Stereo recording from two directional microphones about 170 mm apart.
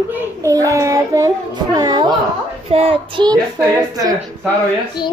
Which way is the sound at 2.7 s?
30° right (ahead or behind).